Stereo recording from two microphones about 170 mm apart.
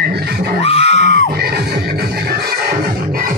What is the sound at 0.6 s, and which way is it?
Screaming, 35° left (ahead or behind).